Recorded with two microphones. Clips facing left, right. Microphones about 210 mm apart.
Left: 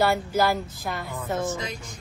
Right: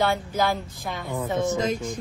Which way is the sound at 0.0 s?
5° left (ahead or behind).